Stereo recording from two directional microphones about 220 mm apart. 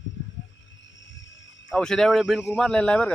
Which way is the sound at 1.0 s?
55° left (ahead or behind).